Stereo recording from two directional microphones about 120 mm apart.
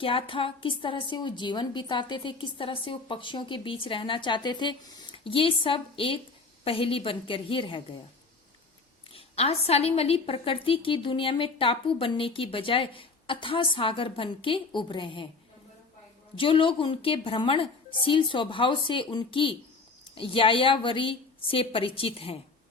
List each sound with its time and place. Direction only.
0.0 s a woman's voice: 45° left (ahead or behind)
9.1 s a woman's voice: 55° left (ahead or behind)
16.4 s a woman's voice: 45° left (ahead or behind)